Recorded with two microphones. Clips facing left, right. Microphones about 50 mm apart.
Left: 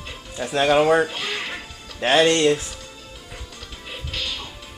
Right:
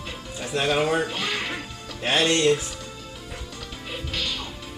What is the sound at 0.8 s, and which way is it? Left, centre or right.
Speech, centre.